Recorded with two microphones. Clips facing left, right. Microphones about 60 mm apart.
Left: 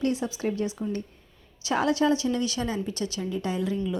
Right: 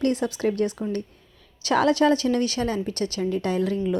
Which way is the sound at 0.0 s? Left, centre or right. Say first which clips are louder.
Right 4 dB; right.